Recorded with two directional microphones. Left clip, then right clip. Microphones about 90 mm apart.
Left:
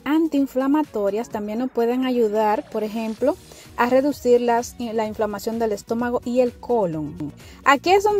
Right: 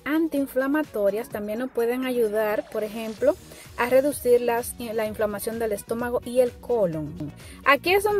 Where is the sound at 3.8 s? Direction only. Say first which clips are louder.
Left 2 dB; 20° left (ahead or behind).